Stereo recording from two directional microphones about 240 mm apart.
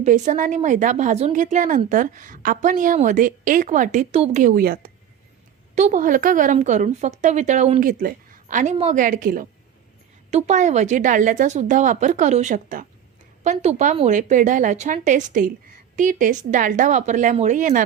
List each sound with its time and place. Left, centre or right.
0.0 s a woman's voice: right